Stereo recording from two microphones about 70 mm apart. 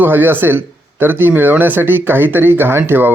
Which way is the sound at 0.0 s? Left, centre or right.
Right.